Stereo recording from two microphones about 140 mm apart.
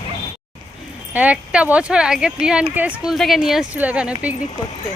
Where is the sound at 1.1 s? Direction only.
10° right (ahead or behind).